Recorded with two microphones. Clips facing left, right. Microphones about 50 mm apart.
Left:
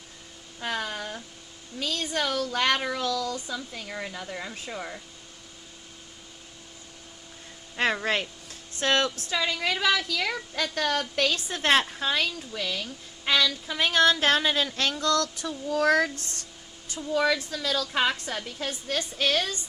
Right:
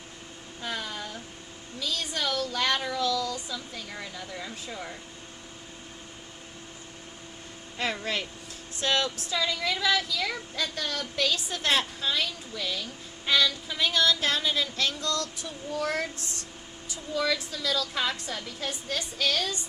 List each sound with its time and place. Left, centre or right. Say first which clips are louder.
0.6 s a sound: left 4 dB; left
1.8 s a woman's voice: left 3 dB; left
8.0 s a woman's voice: left 4 dB; left
15.4 s speech: left 8 dB; left
16.9 s a woman's voice: left 4 dB; left